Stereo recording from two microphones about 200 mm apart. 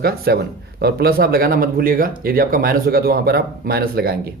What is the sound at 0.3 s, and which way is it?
Speech, 55° right (ahead or behind).